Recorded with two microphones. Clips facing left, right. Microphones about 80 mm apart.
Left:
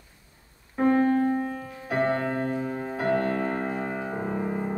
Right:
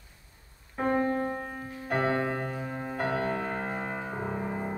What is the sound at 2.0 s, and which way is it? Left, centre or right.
Music, right.